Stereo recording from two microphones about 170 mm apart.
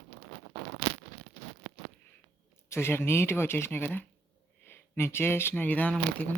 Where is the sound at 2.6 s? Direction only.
15° left (ahead or behind).